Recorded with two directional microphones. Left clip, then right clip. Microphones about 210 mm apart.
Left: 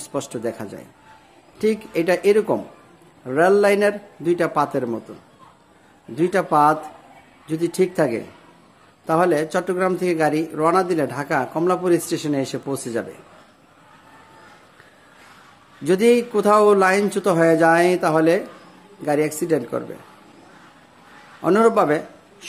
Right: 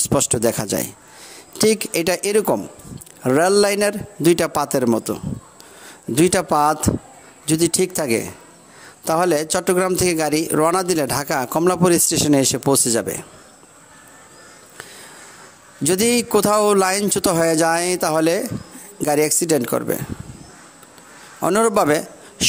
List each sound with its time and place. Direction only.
0.1 s speech: 45° right (ahead or behind)
6.1 s speech: 50° right (ahead or behind)
15.8 s speech: 50° right (ahead or behind)
21.4 s speech: 45° right (ahead or behind)